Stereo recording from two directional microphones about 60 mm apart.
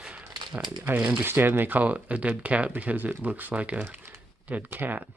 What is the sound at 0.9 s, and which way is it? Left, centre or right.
Speech, right.